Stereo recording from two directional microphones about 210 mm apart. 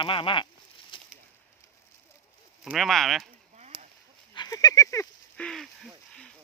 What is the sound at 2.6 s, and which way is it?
Speech, centre (ahead or behind).